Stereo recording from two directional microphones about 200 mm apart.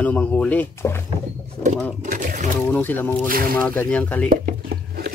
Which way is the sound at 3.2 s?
45° right (ahead or behind).